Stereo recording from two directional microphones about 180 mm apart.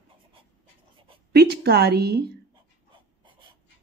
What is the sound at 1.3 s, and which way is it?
A woman's voice, 65° right (ahead or behind).